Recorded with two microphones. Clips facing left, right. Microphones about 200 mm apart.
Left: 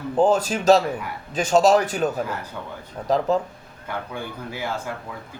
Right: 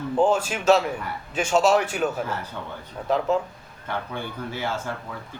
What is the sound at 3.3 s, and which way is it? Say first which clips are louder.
Speech: left 1 dB; 35° left (ahead or behind).